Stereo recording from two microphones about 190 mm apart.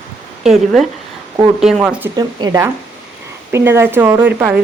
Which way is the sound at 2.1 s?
20° right (ahead or behind).